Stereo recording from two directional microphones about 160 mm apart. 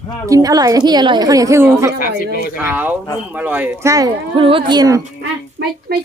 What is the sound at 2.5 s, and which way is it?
Speech, 10° right (ahead or behind).